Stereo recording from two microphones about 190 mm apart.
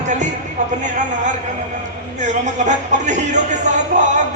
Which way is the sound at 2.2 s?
40° right (ahead or behind).